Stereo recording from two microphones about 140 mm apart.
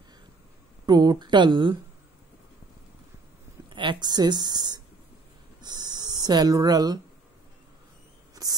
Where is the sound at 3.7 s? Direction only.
35° right (ahead or behind).